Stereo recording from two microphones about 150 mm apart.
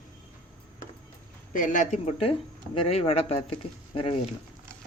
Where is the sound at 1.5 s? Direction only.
60° left (ahead or behind).